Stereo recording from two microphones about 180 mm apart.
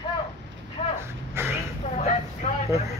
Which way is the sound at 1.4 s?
15° right (ahead or behind).